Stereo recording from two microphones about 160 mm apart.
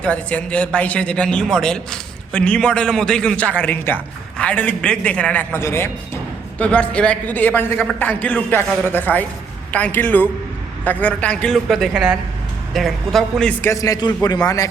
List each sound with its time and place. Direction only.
0.0 s a man's voice: 10° left (ahead or behind)
13.6 s a man's voice: 20° left (ahead or behind)